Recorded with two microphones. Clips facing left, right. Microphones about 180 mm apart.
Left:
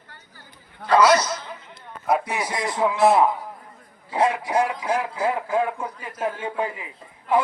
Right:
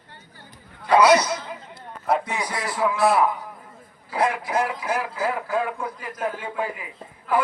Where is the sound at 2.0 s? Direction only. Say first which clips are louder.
Left 1 dB; 15° left (ahead or behind).